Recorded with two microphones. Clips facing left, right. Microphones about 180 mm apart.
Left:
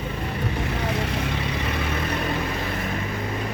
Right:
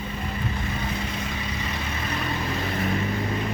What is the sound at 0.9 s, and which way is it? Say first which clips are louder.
Vehicle: left 4 dB; 70° left (ahead or behind).